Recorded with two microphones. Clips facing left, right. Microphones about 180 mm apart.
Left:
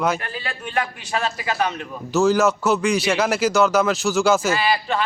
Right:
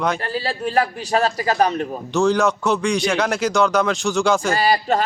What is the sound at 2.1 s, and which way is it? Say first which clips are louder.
A man's voice: left 1 dB; 5° left (ahead or behind).